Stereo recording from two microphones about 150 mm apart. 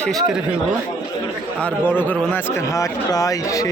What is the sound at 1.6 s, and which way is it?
Speech, 10° left (ahead or behind).